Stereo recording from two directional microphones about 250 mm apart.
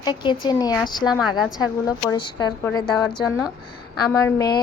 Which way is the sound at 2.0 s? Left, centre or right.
Centre.